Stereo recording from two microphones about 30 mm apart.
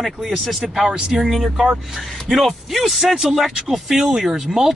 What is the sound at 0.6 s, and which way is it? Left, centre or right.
Speech, centre.